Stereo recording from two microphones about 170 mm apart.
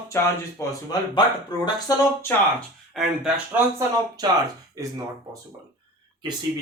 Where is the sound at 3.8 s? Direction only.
20° right (ahead or behind).